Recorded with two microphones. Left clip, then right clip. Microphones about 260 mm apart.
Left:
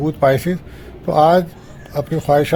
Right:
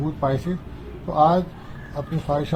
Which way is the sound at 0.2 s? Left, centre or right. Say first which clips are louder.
Left 11 dB; left.